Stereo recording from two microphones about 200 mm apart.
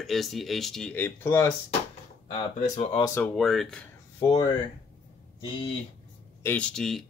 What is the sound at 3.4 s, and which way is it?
Speech, centre (ahead or behind).